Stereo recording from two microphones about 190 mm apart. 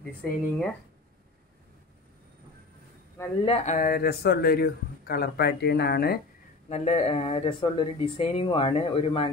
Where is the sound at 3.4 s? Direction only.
35° left (ahead or behind); by 6.1 s 55° left (ahead or behind).